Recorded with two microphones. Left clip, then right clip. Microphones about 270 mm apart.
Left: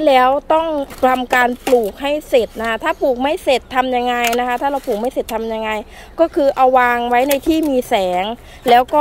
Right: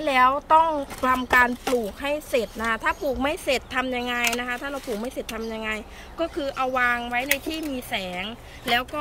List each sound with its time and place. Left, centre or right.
0.0 s speech: centre